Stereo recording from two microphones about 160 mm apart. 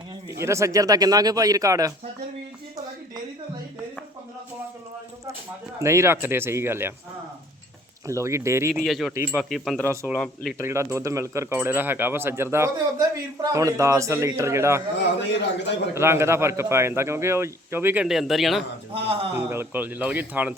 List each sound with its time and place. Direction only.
0.3 s speech: 15° right (ahead or behind)
5.8 s speech: 15° right (ahead or behind)
8.0 s speech: 20° right (ahead or behind)
8.7 s speech: centre (ahead or behind)
9.8 s speech: 15° right (ahead or behind)
15.2 s a man's voice: 90° left
16.0 s speech: 15° right (ahead or behind); by 18.6 s centre (ahead or behind)
19.4 s speech: 15° right (ahead or behind)